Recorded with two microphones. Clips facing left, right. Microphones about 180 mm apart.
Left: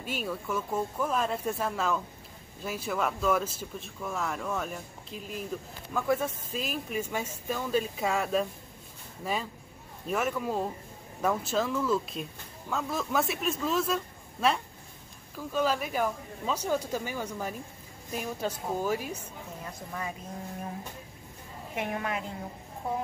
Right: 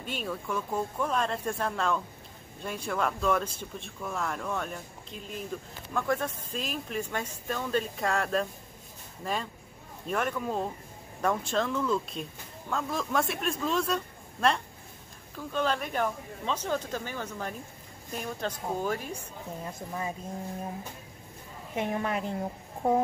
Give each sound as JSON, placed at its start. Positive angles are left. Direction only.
{"t": 0.0, "sound": "speech", "side_deg": 5}
{"t": 19.9, "sound": "a woman's voice", "side_deg": -25}
{"t": 21.7, "sound": "a woman's voice", "side_deg": -30}
{"t": 22.8, "sound": "speech", "side_deg": -45}